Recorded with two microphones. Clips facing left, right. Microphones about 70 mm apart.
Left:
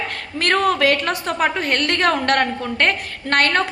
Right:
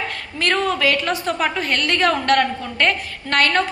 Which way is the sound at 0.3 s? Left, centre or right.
Left.